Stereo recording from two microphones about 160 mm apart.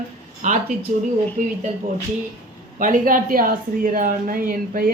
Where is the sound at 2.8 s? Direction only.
55° right (ahead or behind).